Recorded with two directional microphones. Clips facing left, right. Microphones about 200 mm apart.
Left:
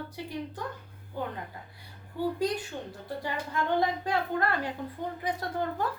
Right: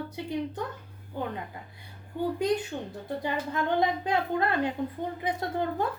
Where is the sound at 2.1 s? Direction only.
20° right (ahead or behind).